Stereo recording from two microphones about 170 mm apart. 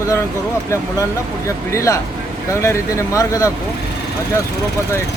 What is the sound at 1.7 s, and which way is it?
Speech, 20° left (ahead or behind).